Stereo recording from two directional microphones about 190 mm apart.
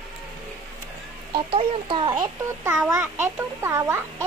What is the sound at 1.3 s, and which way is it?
A child's voice, 30° right (ahead or behind).